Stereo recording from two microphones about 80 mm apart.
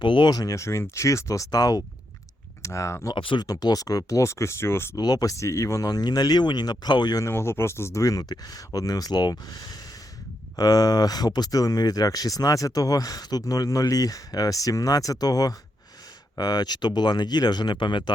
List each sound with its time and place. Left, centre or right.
0.0 s speech: left
0.5 s speech: left
2.6 s speech: left
3.2 s speech: left
3.4 s speech: left
4.9 s speech: left
7.3 s speech: left
8.0 s speech: left